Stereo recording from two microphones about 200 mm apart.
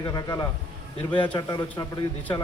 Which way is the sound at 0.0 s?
20° left (ahead or behind).